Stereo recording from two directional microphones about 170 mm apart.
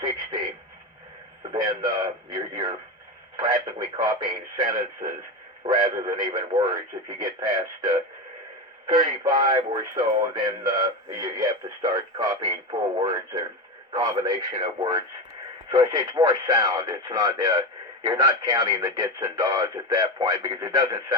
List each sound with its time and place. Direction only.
1.5 s speech: 20° right (ahead or behind)